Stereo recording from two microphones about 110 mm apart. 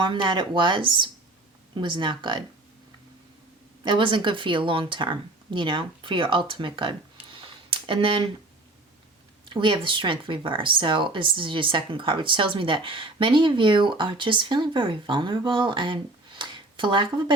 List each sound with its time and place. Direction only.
0.0 s speech: 45° right (ahead or behind)
3.8 s speech: 45° right (ahead or behind)
9.5 s speech: 45° right (ahead or behind)